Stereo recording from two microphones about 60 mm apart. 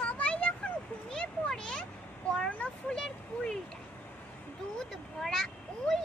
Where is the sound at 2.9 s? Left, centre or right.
Centre.